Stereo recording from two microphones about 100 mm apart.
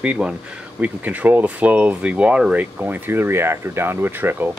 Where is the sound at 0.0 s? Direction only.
10° right (ahead or behind).